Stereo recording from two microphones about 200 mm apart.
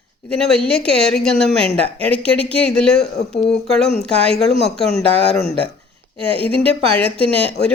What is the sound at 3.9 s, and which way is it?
Speech, 30° right (ahead or behind).